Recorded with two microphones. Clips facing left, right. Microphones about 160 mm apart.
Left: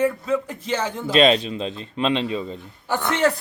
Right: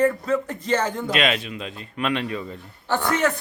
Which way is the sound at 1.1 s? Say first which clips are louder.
Left 11 dB; 30° left (ahead or behind).